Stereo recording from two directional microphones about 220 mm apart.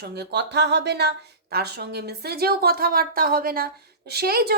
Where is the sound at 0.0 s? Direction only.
45° right (ahead or behind).